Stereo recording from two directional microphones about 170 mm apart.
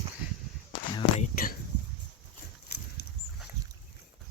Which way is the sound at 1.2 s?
55° left (ahead or behind).